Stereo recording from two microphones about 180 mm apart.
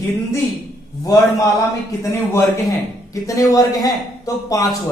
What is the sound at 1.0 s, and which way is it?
A man's voice, 15° left (ahead or behind).